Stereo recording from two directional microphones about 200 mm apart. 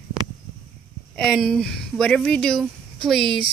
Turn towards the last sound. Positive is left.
turn(degrees=0)  # may be behind; listen again after turning